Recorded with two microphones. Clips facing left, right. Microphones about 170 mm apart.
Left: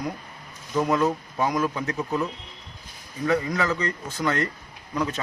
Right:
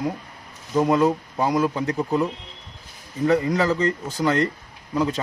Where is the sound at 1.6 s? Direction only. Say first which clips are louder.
Right 4 dB; 30° right (ahead or behind).